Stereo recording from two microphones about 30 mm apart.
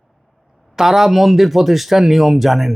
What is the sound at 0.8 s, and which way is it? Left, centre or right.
Speech, centre.